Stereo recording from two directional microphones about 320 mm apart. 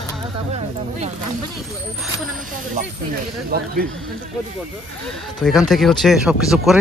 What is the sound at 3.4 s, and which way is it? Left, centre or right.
Speech, right.